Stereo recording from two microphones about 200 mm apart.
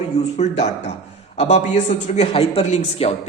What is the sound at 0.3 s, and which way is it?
A man's voice, 35° left (ahead or behind).